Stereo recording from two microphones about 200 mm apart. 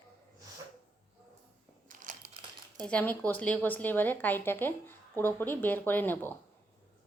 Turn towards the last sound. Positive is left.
turn(degrees=10)  # may be behind; listen again after turning